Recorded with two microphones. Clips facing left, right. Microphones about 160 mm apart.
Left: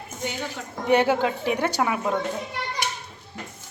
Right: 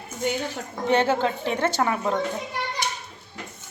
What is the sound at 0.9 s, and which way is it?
A woman's voice, 15° left (ahead or behind).